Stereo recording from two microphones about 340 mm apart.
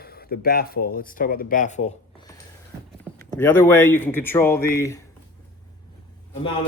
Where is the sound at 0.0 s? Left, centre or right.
Left.